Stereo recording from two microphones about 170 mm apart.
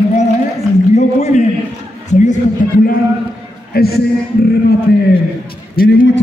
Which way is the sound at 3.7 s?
65° left (ahead or behind).